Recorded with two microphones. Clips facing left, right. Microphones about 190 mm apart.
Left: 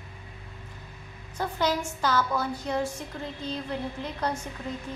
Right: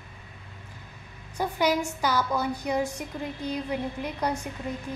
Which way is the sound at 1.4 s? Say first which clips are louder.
Right 2 dB; 10° right (ahead or behind).